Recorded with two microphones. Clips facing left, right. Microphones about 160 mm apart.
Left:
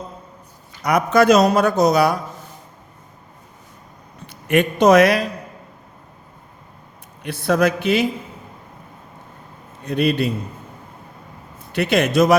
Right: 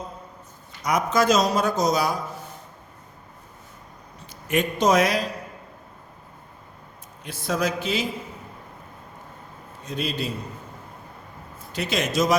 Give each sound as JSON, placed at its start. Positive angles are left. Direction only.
{"t": 0.8, "sound": "a man's voice", "side_deg": 65}
{"t": 4.3, "sound": "a man's voice", "side_deg": 65}
{"t": 7.3, "sound": "a man's voice", "side_deg": 65}
{"t": 9.8, "sound": "a man's voice", "side_deg": 60}
{"t": 11.7, "sound": "a man's voice", "side_deg": 60}